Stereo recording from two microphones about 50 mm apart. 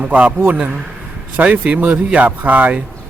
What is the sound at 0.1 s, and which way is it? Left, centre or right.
A man's voice, right.